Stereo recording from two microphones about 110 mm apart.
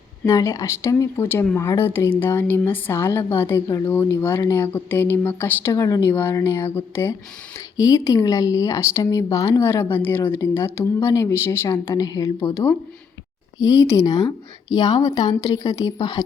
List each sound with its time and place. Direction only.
0.3 s speech: 30° left (ahead or behind)
5.7 s a woman's voice: 30° left (ahead or behind)
13.6 s a woman's voice: 40° left (ahead or behind)